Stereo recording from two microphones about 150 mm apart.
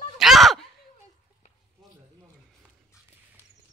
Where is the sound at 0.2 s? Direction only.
Centre (ahead or behind).